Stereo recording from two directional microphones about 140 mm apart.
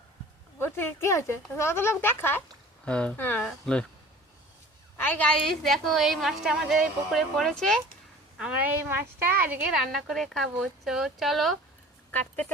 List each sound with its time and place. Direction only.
0.6 s speech: 15° left (ahead or behind)
4.9 s a woman's voice: 10° left (ahead or behind)
8.4 s a woman's voice: 10° right (ahead or behind)
9.8 s a woman's voice: centre (ahead or behind)